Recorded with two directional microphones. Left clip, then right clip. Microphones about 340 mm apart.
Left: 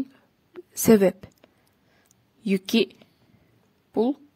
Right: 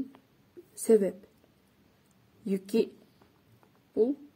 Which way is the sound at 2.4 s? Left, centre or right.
Left.